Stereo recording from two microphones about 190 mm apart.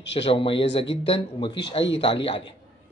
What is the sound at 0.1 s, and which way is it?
Speech, 30° left (ahead or behind).